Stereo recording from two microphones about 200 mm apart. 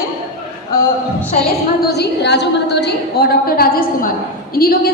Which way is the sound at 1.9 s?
55° left (ahead or behind).